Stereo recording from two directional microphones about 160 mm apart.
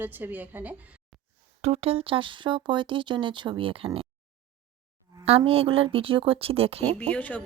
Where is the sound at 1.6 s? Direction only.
40° right (ahead or behind).